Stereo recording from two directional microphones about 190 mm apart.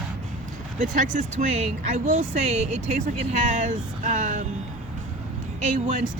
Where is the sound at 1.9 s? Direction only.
35° right (ahead or behind).